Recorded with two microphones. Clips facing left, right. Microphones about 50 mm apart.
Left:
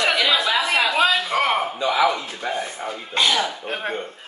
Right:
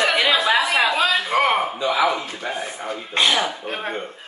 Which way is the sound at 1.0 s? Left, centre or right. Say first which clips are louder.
Right 1 dB; centre.